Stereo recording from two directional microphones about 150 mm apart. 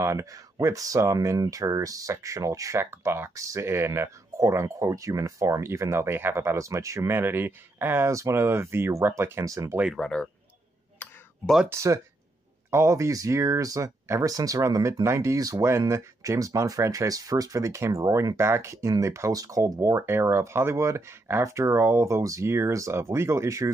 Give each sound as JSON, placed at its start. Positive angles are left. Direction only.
{"t": 0.0, "sound": "speech", "side_deg": -20}
{"t": 9.8, "sound": "speech", "side_deg": 5}
{"t": 11.0, "sound": "a sound", "side_deg": 5}
{"t": 11.6, "sound": "speech", "side_deg": -20}